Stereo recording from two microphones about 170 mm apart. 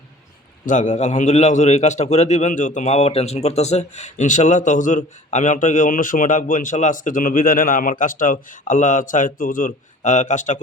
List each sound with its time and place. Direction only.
0.6 s a man's voice: 50° left (ahead or behind)